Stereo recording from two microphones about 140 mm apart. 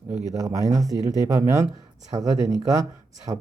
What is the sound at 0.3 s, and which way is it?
Speech, 25° right (ahead or behind).